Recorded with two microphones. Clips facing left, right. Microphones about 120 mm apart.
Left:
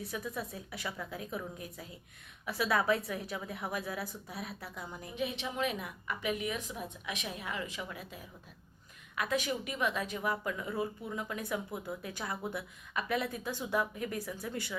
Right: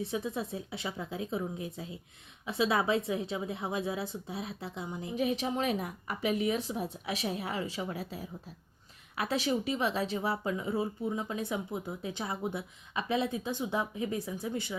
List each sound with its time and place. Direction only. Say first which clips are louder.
0.0 s a woman's voice: right 5 dB; 25° right (ahead or behind)
5.1 s a woman's voice: right 6 dB; 40° right (ahead or behind); by 14.8 s 20° right (ahead or behind)